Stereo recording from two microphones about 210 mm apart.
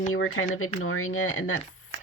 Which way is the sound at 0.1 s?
75° left (ahead or behind).